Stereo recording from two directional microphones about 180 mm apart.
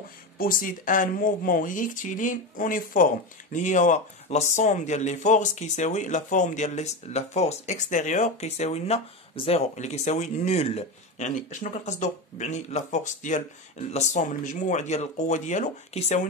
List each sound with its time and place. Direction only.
0.4 s speech: 50° left (ahead or behind)